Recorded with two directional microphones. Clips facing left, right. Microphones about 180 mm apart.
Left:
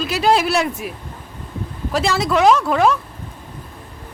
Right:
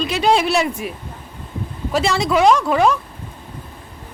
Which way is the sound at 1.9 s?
Centre (ahead or behind).